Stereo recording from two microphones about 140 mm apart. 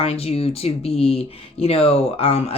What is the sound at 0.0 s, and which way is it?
Speech, 45° left (ahead or behind).